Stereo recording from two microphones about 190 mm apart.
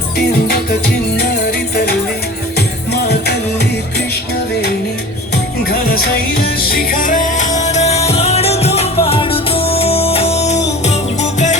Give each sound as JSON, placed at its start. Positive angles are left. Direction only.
{"t": 1.2, "sound": "music", "side_deg": 55}
{"t": 5.3, "sound": "music", "side_deg": 55}